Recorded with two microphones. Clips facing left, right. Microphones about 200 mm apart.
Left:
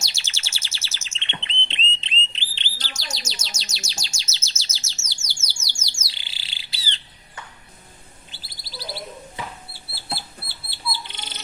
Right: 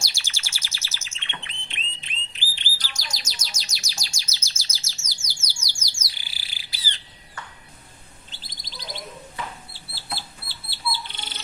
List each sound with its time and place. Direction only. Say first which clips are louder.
0.0 s bird: even; 25° left (ahead or behind)
3.6 s chirp: left 3 dB; 25° left (ahead or behind)
4.9 s bird: left 1 dB; 25° left (ahead or behind)
8.3 s bird: left 3 dB; 10° left (ahead or behind)
10.2 s bird: left 1 dB; 15° left (ahead or behind)